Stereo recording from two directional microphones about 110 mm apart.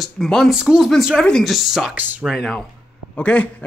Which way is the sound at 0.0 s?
5° left (ahead or behind).